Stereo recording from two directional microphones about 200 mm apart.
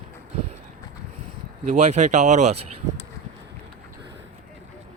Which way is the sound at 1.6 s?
35° right (ahead or behind).